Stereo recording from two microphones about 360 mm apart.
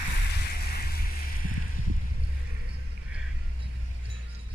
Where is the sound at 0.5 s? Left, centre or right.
Left.